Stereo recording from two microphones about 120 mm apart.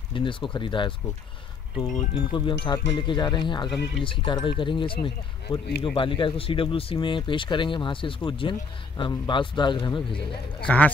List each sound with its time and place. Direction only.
0.1 s speech: 45° left (ahead or behind)
2.1 s speech: 45° left (ahead or behind)
10.7 s speech: 15° left (ahead or behind)